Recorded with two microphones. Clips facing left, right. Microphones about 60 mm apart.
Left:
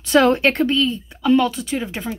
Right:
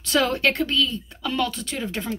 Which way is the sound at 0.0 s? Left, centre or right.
Left.